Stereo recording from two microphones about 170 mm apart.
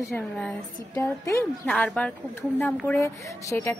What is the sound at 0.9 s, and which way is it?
Speech, 15° left (ahead or behind).